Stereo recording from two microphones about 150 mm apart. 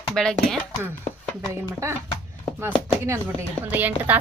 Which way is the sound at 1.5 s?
20° right (ahead or behind).